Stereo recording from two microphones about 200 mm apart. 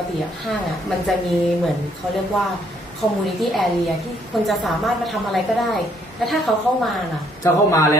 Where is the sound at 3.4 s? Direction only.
Centre (ahead or behind).